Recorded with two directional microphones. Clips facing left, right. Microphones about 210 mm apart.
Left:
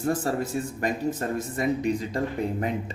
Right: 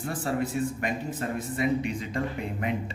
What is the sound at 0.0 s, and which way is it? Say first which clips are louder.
Speech: left 3 dB; 45° left (ahead or behind).